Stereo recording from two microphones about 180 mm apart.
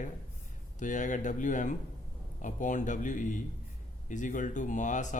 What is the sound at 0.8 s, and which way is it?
Speech, 45° left (ahead or behind).